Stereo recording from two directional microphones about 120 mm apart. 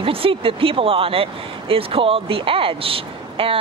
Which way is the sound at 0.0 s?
50° right (ahead or behind).